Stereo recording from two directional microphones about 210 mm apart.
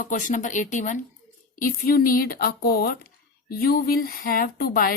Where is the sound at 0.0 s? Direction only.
40° left (ahead or behind).